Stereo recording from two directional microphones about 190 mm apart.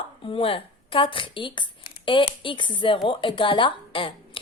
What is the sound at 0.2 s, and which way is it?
A woman's voice, 30° left (ahead or behind).